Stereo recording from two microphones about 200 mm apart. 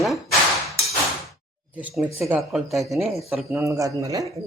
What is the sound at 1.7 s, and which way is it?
Speech, 5° right (ahead or behind).